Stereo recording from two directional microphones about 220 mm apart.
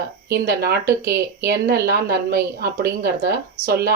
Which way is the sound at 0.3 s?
45° right (ahead or behind).